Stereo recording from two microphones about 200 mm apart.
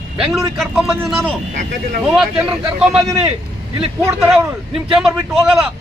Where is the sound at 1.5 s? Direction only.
45° right (ahead or behind).